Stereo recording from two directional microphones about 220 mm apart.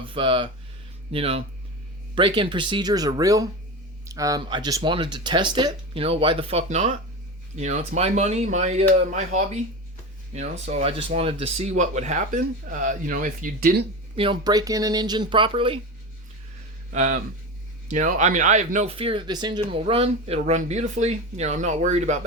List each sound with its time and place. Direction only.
0.0 s speech: 25° right (ahead or behind); by 13.8 s 40° right (ahead or behind)
14.2 s speech: 20° right (ahead or behind)
16.9 s speech: 30° right (ahead or behind)